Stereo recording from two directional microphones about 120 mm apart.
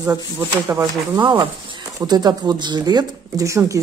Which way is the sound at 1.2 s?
40° right (ahead or behind).